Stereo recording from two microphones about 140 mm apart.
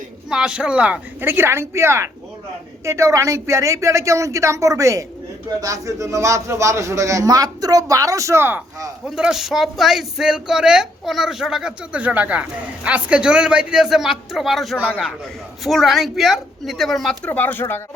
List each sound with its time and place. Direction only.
0.3 s a man's voice: 5° right (ahead or behind)
9.0 s speech: 5° right (ahead or behind); by 17.8 s 15° left (ahead or behind)